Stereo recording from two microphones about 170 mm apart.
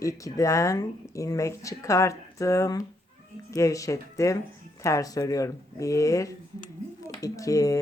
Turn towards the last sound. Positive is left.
turn(degrees=20)  # may be behind; listen again after turning